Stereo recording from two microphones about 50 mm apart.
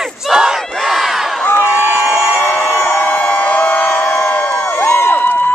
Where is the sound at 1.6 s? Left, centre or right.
Right.